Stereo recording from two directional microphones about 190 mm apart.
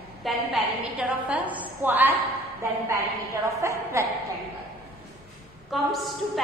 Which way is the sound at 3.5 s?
15° right (ahead or behind).